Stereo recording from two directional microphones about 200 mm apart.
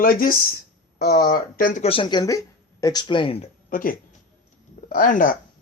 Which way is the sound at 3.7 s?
45° left (ahead or behind).